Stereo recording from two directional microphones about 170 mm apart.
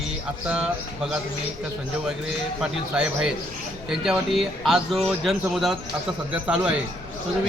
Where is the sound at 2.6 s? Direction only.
5° right (ahead or behind).